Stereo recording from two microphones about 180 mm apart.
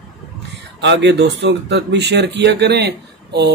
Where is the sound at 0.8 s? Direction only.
75° right (ahead or behind).